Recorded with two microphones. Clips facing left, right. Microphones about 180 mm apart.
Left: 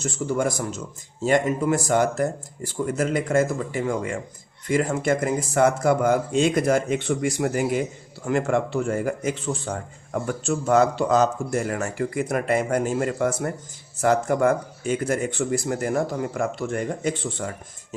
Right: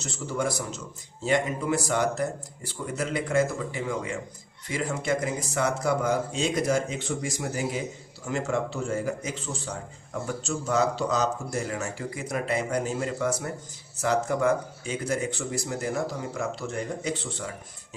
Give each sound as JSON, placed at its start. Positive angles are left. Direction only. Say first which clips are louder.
{"t": 0.0, "sound": "a man's voice", "louder": "left 5 dB", "side_deg": 50}